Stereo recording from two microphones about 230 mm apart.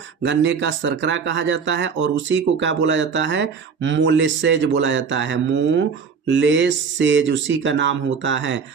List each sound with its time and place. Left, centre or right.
0.2 s speech: right